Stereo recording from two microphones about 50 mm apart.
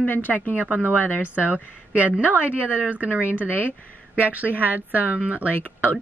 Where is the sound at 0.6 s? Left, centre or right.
Right.